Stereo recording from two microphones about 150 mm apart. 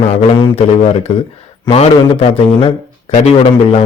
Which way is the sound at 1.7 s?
40° left (ahead or behind).